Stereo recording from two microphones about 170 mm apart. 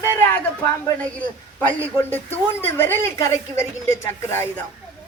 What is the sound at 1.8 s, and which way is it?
A woman's voice, 10° left (ahead or behind).